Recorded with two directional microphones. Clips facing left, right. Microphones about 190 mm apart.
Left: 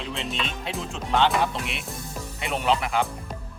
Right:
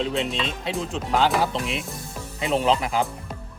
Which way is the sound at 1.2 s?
35° right (ahead or behind).